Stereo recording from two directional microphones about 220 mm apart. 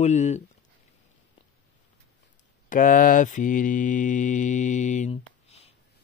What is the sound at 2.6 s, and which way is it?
Mantra, 40° left (ahead or behind).